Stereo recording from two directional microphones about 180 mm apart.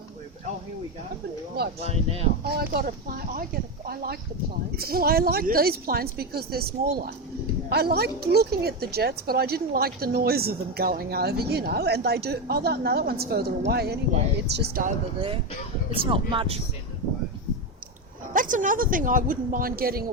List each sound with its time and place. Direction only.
1.8 s speech: 35° right (ahead or behind)
2.4 s speech: 60° right (ahead or behind)
16.0 s speech: 30° right (ahead or behind)
18.3 s a woman's voice: 45° right (ahead or behind)